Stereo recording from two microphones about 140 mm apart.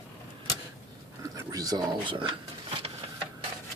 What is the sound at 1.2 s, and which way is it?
Speech, 25° right (ahead or behind).